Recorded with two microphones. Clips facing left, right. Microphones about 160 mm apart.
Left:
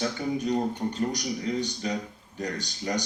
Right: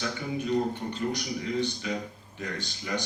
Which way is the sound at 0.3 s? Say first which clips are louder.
Right 3 dB; 40° left (ahead or behind).